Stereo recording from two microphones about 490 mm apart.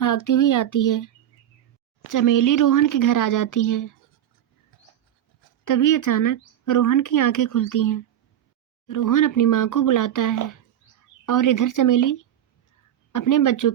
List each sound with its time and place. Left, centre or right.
0.0 s speech: left
5.6 s speech: left